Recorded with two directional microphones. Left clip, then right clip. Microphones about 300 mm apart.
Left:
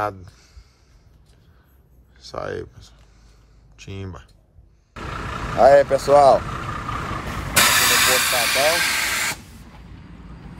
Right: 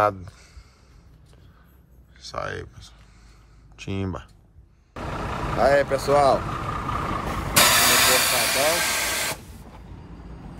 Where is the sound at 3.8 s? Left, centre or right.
Centre.